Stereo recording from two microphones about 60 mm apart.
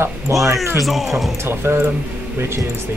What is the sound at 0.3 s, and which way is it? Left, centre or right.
Speech, right.